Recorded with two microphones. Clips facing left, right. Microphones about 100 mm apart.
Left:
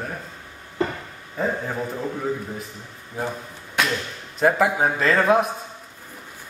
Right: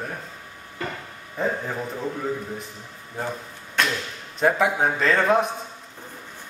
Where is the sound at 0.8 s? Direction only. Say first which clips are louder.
Left 7 dB; 25° left (ahead or behind).